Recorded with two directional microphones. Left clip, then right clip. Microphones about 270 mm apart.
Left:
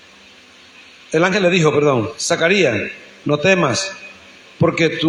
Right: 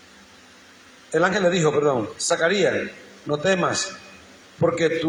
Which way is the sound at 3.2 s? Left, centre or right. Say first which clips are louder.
Left 6 dB; left.